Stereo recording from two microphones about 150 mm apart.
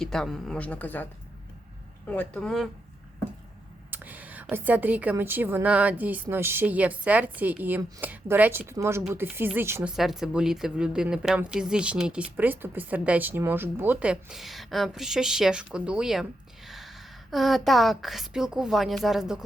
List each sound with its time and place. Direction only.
0.0 s speech: 5° left (ahead or behind)
2.0 s speech: 5° left (ahead or behind)
3.9 s speech: 10° right (ahead or behind)
9.9 s speech: 5° right (ahead or behind)
16.6 s a sound: centre (ahead or behind)
17.3 s speech: centre (ahead or behind)